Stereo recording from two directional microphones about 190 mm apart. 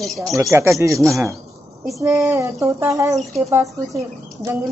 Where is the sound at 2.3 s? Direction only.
15° right (ahead or behind).